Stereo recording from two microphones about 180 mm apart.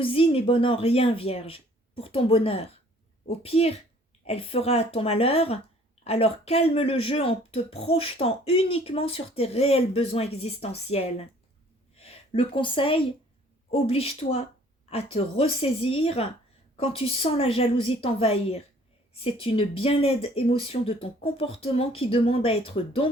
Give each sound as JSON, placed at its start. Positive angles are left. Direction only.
{"t": 0.0, "sound": "speech", "side_deg": 30}